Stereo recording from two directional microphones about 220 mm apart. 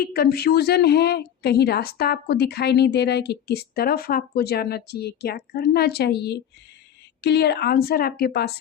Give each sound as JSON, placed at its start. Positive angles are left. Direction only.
{"t": 0.0, "sound": "speech", "side_deg": 45}